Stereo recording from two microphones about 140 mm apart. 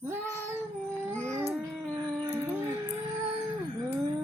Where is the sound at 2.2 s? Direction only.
15° right (ahead or behind).